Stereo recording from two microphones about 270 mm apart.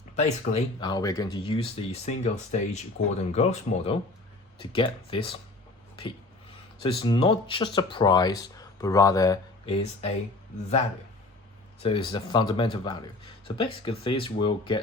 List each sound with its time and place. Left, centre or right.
0.2 s speech: left
11.8 s speech: centre